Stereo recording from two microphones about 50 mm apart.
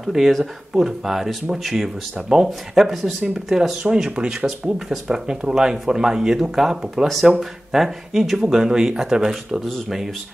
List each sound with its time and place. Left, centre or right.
0.0 s speech: centre
2.1 s speech: centre
3.8 s speech: centre
4.7 s speech: centre